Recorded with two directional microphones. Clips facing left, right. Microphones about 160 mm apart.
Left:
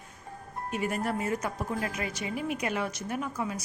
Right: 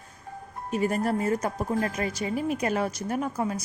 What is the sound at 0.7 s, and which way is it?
Speech, 35° right (ahead or behind).